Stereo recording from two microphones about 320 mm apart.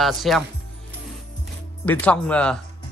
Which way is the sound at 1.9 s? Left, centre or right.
Centre.